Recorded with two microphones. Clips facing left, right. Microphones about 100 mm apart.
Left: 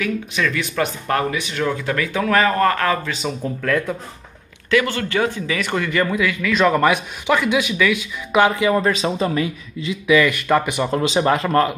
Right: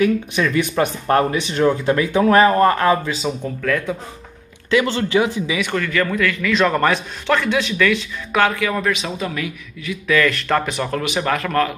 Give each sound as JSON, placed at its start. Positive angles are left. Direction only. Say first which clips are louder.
{"t": 0.0, "sound": "speech", "louder": "right 4 dB", "side_deg": -25}
{"t": 3.3, "sound": "speech", "louder": "right 2 dB", "side_deg": -10}
{"t": 4.6, "sound": "speech", "louder": "right 1 dB", "side_deg": -25}
{"t": 5.7, "sound": "a man's voice", "louder": "even", "side_deg": 10}
{"t": 8.3, "sound": "speech", "louder": "left 3 dB", "side_deg": 20}
{"t": 10.0, "sound": "a man's voice", "louder": "left 2 dB", "side_deg": 15}
{"t": 10.9, "sound": "speech", "louder": "left 5 dB", "side_deg": 25}